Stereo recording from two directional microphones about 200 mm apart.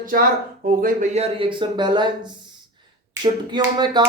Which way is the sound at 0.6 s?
45° right (ahead or behind).